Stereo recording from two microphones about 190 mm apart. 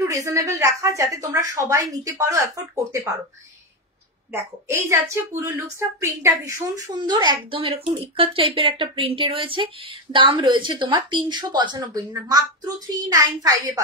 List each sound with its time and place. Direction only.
0.1 s speech: 15° right (ahead or behind)
4.3 s a woman's voice: 15° right (ahead or behind)